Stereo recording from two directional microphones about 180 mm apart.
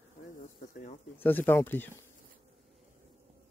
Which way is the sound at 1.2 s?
10° left (ahead or behind).